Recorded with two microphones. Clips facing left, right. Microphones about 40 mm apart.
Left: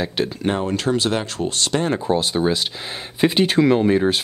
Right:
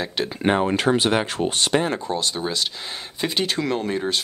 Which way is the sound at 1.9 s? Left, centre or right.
Centre.